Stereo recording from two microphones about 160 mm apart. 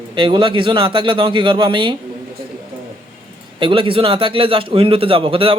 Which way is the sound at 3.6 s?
30° right (ahead or behind).